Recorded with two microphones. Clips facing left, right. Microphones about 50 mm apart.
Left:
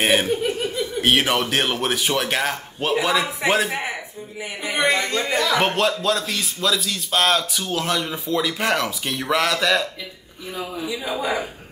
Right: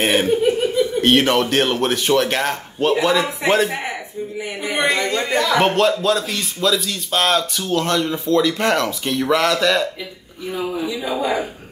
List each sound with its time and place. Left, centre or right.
0.0 s speech: centre